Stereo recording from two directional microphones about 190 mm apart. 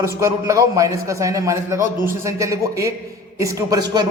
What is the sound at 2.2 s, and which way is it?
Speech, 15° right (ahead or behind).